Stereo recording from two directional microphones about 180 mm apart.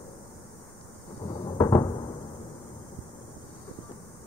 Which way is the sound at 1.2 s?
30° left (ahead or behind).